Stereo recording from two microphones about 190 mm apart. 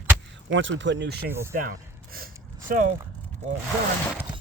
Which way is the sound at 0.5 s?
75° right (ahead or behind).